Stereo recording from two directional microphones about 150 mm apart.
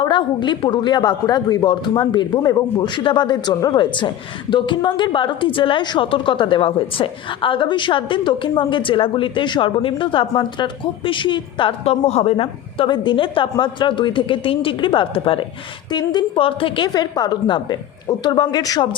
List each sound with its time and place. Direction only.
0.0 s a woman's voice: 30° left (ahead or behind)